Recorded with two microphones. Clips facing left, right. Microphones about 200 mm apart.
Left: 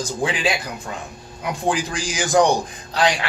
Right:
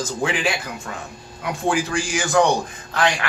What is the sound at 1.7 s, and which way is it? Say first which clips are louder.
Speech: right 2 dB; 20° left (ahead or behind).